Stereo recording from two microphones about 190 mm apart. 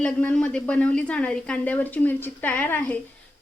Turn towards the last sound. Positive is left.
turn(degrees=10)  # may be behind; listen again after turning